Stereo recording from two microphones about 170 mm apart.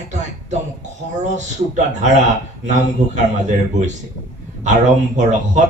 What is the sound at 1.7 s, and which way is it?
A man's voice, 45° right (ahead or behind).